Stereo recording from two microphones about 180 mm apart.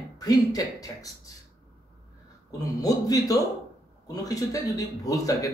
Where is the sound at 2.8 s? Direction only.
20° left (ahead or behind).